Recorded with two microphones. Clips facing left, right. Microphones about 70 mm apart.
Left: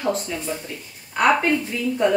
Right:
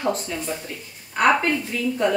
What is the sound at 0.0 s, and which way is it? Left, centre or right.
A woman's voice, centre.